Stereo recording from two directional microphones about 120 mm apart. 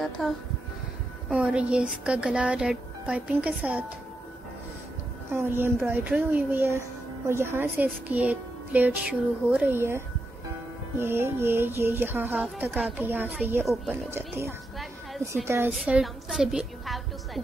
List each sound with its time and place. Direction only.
1.3 s speech: 10° right (ahead or behind)
5.3 s speech: 20° right (ahead or behind)
11.0 s music: 20° right (ahead or behind)
12.4 s speech: 15° right (ahead or behind)
14.1 s music: 20° right (ahead or behind)
14.8 s a sound: centre (ahead or behind)
15.4 s music: 20° right (ahead or behind)
15.7 s a woman's voice: 5° right (ahead or behind)